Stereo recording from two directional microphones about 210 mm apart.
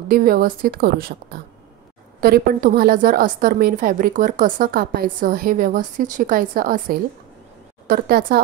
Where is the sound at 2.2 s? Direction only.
45° right (ahead or behind).